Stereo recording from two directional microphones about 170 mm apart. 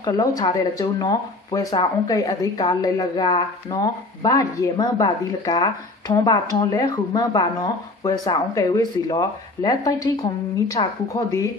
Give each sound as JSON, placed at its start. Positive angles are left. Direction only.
{"t": 0.0, "sound": "speech", "side_deg": 20}